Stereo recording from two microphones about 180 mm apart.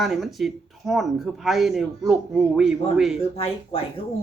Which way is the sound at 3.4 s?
30° left (ahead or behind).